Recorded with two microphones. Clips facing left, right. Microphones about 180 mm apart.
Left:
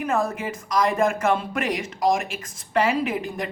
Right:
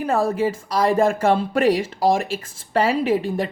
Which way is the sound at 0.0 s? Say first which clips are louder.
Right 5 dB; 30° right (ahead or behind).